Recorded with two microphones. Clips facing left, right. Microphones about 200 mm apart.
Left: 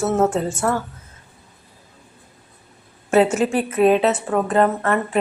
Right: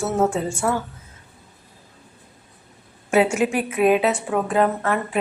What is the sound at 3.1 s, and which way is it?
A woman's voice, 10° right (ahead or behind).